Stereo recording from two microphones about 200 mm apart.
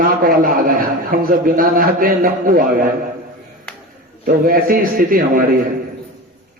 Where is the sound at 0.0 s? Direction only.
45° right (ahead or behind).